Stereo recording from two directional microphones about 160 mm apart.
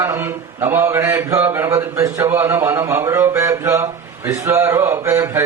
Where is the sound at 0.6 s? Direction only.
15° right (ahead or behind).